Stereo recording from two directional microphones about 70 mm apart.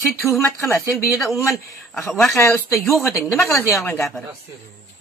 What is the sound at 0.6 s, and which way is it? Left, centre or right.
Speech, left.